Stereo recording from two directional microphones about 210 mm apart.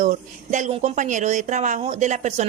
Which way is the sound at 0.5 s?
35° right (ahead or behind).